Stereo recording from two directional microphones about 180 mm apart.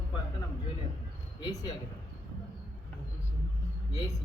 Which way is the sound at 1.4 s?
20° left (ahead or behind).